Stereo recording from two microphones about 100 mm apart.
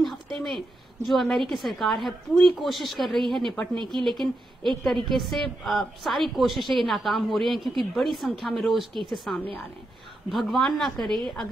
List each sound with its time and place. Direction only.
1.0 s a woman's voice: centre (ahead or behind)